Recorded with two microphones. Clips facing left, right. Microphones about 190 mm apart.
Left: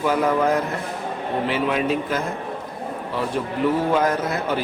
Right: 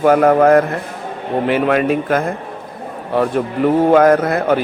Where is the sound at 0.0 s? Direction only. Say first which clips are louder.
Right 9 dB; 55° right (ahead or behind).